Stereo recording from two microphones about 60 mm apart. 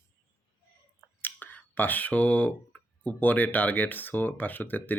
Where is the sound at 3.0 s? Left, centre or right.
Left.